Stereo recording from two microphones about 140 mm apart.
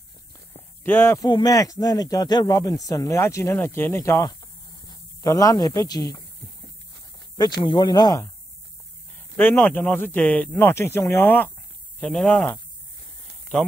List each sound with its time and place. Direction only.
0.5 s a sound: 15° left (ahead or behind)
1.2 s a man's voice: 30° left (ahead or behind)
7.3 s speech: 30° left (ahead or behind)
9.4 s speech: 15° left (ahead or behind)